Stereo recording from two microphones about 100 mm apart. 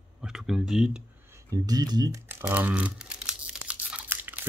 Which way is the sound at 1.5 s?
40° right (ahead or behind).